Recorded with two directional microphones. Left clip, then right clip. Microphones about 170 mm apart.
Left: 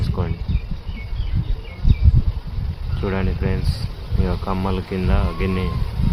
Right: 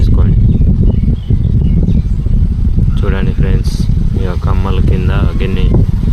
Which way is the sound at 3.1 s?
15° right (ahead or behind).